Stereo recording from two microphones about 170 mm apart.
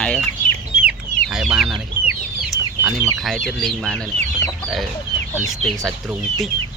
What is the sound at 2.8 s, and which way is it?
Speech, 15° right (ahead or behind).